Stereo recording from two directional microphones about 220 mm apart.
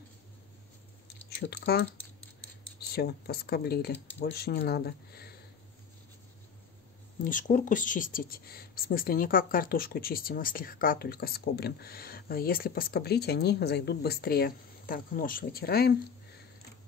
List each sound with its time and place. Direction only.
1.5 s speech: 45° left (ahead or behind)
2.9 s speech: 45° left (ahead or behind)
7.2 s speech: 35° left (ahead or behind)